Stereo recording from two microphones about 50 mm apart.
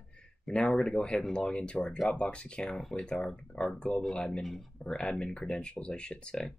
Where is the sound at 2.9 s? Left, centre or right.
Centre.